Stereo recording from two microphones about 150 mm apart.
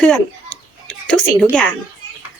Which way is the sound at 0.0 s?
5° left (ahead or behind).